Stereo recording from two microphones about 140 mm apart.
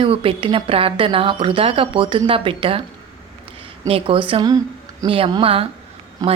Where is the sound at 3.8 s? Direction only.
40° right (ahead or behind).